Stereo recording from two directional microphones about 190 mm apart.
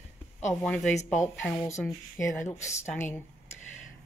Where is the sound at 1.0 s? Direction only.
40° left (ahead or behind).